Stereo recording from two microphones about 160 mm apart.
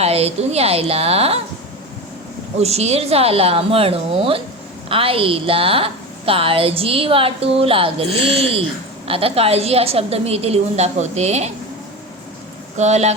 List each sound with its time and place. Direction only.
0.0 s a woman's voice: 40° right (ahead or behind)
2.6 s a woman's voice: 40° right (ahead or behind)
12.7 s speech: 45° right (ahead or behind)